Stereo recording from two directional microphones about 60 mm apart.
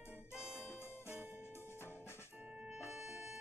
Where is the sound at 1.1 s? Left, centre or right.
Right.